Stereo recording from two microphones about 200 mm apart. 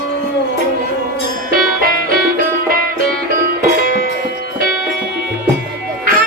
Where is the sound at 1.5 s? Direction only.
45° right (ahead or behind).